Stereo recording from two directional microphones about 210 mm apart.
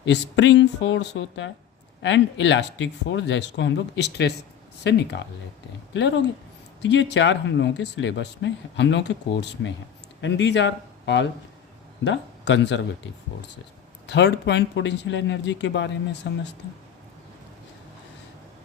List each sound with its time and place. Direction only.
0.0 s speech: 60° left (ahead or behind)
14.1 s speech: 55° left (ahead or behind)